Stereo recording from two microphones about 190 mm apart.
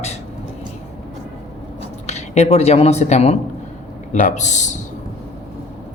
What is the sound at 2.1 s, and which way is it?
Speech, 35° left (ahead or behind).